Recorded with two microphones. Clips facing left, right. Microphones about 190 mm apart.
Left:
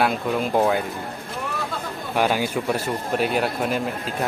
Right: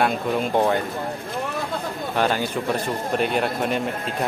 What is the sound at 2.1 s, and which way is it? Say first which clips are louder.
A man's voice: left 1 dB; 10° left (ahead or behind).